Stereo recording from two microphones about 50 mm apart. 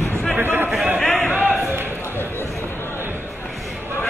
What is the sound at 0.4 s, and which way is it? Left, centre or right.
Chatter, right.